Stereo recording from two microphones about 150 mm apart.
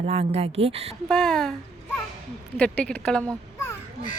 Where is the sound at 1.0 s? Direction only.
5° left (ahead or behind).